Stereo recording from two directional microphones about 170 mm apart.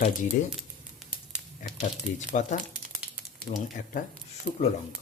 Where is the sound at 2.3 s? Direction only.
45° left (ahead or behind).